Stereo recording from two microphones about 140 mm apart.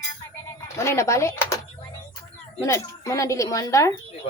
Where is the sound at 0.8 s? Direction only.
20° left (ahead or behind).